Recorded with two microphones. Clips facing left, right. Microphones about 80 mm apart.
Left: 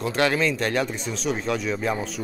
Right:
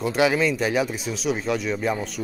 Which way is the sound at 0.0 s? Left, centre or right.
Centre.